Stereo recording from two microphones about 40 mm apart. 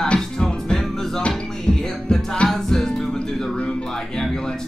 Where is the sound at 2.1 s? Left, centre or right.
Left.